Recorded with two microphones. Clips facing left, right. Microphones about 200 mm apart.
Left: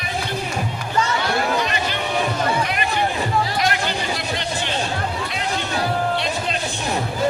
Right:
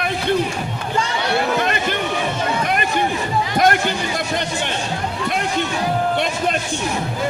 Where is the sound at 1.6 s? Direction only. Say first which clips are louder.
Right 3 dB; 55° right (ahead or behind).